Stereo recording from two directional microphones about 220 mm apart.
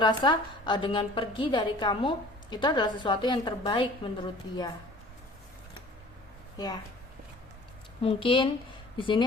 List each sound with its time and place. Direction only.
0.0 s a woman's voice: 20° left (ahead or behind)
8.0 s a woman's voice: 25° left (ahead or behind)